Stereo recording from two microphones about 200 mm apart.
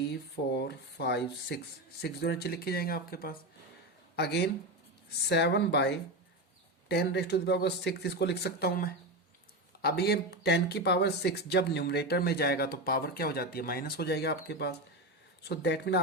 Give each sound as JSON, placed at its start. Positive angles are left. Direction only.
{"t": 0.1, "sound": "speech", "side_deg": 55}